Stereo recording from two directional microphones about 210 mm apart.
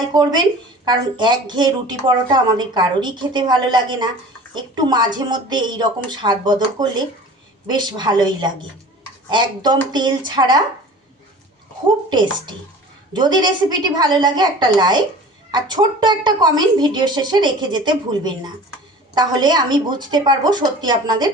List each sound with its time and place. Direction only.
0.1 s speech: 20° right (ahead or behind)
12.1 s speech: 20° right (ahead or behind)